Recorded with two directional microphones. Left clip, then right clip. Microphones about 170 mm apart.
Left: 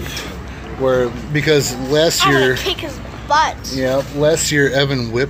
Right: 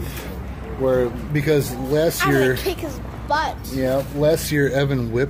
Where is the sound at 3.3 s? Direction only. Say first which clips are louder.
Left 7 dB; 20° right (ahead or behind).